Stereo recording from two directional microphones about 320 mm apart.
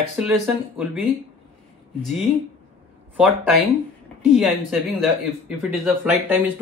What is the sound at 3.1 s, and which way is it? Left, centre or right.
Speech, centre.